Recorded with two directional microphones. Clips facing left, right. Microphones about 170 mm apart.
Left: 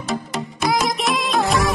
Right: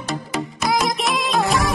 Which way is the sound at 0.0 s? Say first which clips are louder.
Even; centre (ahead or behind).